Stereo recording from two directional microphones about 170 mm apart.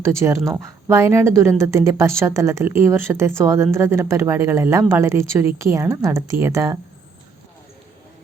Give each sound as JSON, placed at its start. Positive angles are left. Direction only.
{"t": 0.0, "sound": "speech", "side_deg": -15}